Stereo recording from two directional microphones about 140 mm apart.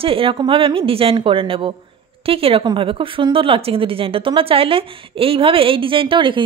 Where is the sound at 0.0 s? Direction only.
40° right (ahead or behind).